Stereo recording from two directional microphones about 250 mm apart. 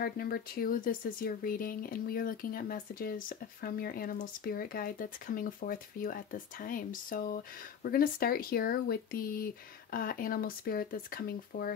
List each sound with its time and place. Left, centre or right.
0.0 s speech: left